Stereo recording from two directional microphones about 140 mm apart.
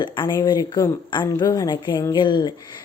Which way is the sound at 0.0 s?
35° left (ahead or behind).